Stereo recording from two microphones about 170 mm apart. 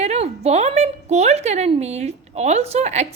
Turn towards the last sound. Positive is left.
turn(degrees=-40)  # may be behind; listen again after turning